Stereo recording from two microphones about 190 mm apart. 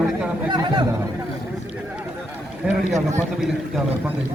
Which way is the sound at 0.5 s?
20° right (ahead or behind).